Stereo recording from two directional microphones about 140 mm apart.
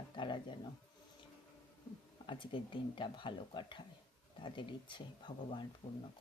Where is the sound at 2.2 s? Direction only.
35° left (ahead or behind).